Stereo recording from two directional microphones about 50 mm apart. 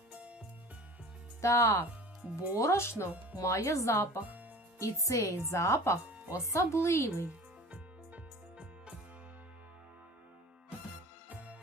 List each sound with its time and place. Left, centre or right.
0.1 s music: right
1.4 s speech: left
2.2 s speech: right
2.6 s speech: left
3.4 s speech: left
4.8 s speech: left
5.5 s speech: left
6.5 s speech: left
6.8 s speech: left
7.7 s music: right
11.3 s music: right